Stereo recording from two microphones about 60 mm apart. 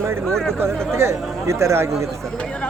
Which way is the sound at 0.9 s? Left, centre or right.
Right.